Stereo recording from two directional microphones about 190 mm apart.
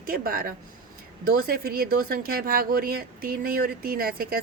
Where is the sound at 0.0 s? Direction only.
50° right (ahead or behind).